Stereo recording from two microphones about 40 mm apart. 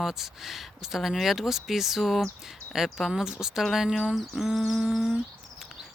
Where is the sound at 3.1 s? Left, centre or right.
Centre.